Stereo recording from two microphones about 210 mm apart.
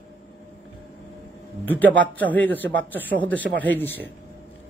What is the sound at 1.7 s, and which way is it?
Speech, 5° left (ahead or behind).